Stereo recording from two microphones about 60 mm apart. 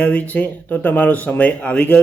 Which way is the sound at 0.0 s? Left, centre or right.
Left.